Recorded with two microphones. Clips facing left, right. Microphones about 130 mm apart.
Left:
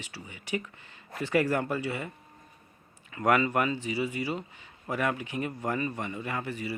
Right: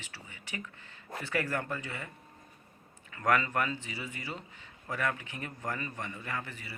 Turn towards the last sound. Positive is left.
turn(degrees=15)  # may be behind; listen again after turning